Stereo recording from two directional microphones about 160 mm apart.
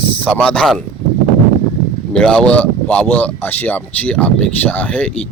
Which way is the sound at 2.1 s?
5° left (ahead or behind).